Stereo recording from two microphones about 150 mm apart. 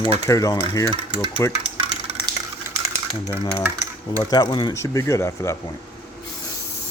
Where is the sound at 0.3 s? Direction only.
25° left (ahead or behind).